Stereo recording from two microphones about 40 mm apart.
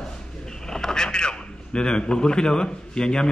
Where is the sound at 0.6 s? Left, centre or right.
Centre.